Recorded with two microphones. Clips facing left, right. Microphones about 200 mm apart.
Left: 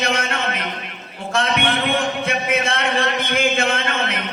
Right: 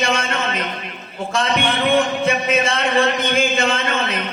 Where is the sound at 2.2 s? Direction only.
60° left (ahead or behind).